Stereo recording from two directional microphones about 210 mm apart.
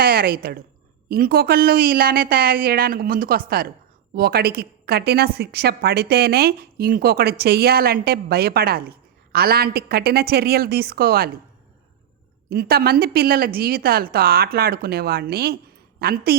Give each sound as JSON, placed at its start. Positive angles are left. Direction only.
{"t": 0.0, "sound": "a woman's voice", "side_deg": -45}
{"t": 12.5, "sound": "a woman's voice", "side_deg": -50}